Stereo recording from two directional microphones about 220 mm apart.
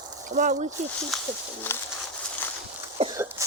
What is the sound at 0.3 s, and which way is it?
Speech, 35° right (ahead or behind).